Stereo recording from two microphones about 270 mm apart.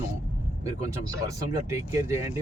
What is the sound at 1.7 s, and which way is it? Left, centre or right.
Speech, centre.